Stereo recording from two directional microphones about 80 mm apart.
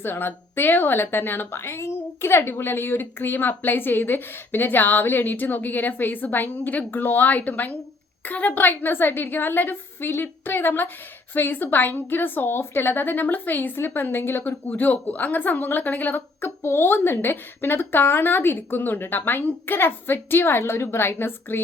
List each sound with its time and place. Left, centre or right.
0.0 s a woman's voice: left